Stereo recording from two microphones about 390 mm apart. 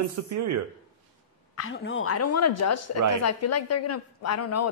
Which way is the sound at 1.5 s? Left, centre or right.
Left.